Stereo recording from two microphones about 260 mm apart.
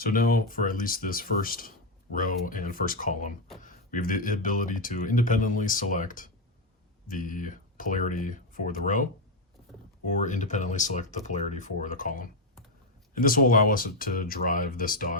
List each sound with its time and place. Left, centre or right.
0.0 s speech: left
10.1 s speech: left